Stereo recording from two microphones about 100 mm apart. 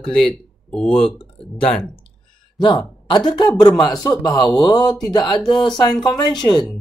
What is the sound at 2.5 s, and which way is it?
Speech, 45° left (ahead or behind).